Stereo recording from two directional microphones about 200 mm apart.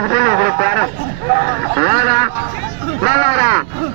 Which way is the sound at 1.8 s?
40° right (ahead or behind).